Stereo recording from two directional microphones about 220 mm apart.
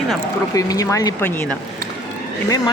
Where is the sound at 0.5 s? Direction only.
15° left (ahead or behind).